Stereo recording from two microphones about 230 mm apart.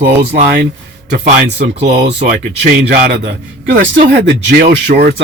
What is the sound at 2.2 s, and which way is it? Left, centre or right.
A man's voice, right.